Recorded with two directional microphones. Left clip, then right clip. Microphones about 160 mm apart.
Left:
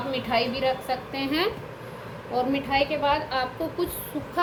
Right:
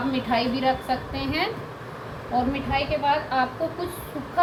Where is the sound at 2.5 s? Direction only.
90° left.